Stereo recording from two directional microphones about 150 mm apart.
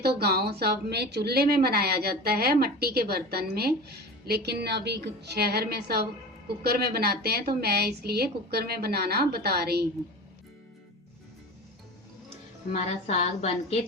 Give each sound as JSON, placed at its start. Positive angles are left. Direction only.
{"t": 0.0, "sound": "a woman's voice", "side_deg": -90}
{"t": 12.7, "sound": "a woman's voice", "side_deg": 45}